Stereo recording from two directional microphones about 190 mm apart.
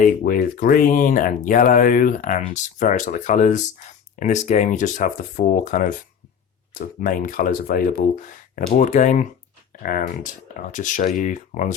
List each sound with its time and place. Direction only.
0.0 s speech: 50° left (ahead or behind)